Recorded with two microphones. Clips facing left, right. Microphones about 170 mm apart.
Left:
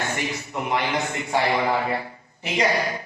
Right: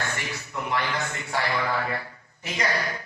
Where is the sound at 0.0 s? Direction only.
20° left (ahead or behind).